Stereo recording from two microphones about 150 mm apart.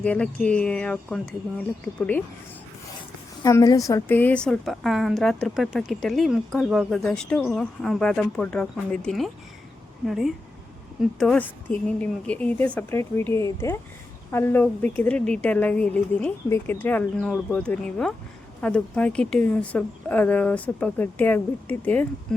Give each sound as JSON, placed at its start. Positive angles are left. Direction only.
{"t": 0.0, "sound": "a woman's voice", "side_deg": 10}
{"t": 3.4, "sound": "a woman's voice", "side_deg": 20}